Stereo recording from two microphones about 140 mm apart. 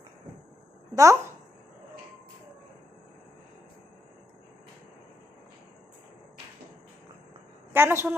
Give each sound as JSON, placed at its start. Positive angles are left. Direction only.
{"t": 0.9, "sound": "speech", "side_deg": -20}
{"t": 7.7, "sound": "a woman's voice", "side_deg": -15}